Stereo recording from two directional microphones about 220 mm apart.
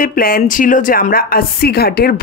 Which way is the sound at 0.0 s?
40° left (ahead or behind).